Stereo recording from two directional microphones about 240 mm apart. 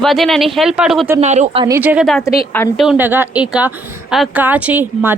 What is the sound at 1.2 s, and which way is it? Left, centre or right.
Speech, right.